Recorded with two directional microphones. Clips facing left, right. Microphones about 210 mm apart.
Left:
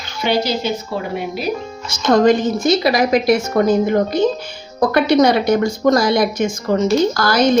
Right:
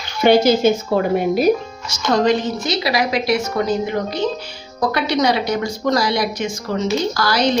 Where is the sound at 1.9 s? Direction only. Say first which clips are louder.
Left 4 dB; 50° left (ahead or behind).